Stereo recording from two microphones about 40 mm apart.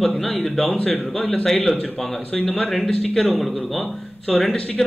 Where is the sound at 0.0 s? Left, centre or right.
Centre.